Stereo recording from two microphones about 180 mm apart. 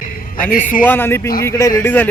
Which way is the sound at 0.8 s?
10° left (ahead or behind).